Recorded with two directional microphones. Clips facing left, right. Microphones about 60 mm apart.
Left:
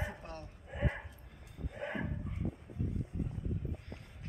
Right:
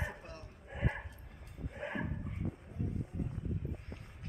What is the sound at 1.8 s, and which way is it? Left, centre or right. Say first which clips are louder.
Dog: left 1 dB; centre.